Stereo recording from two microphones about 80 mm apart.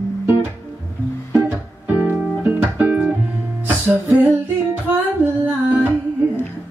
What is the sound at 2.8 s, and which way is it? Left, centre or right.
Music, centre.